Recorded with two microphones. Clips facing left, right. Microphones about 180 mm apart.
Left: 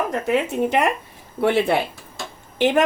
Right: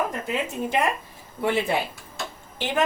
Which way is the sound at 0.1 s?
70° left (ahead or behind).